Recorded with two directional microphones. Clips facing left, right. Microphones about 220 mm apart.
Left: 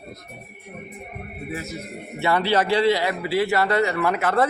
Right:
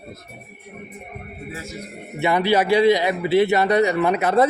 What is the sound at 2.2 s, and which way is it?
A man's voice, 15° right (ahead or behind).